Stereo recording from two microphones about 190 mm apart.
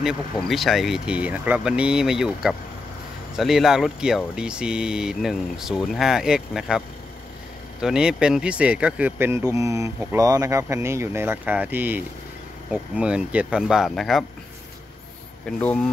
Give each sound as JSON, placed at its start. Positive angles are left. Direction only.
{"t": 0.0, "sound": "speech", "side_deg": 0}
{"t": 7.8, "sound": "speech", "side_deg": -5}
{"t": 15.6, "sound": "speech", "side_deg": 5}